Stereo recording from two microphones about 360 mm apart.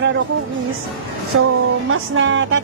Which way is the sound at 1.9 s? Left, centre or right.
Right.